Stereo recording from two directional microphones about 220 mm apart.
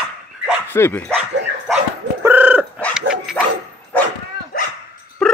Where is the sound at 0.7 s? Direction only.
10° left (ahead or behind).